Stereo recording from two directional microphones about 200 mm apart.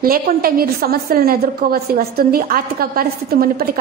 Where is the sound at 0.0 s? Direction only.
45° right (ahead or behind).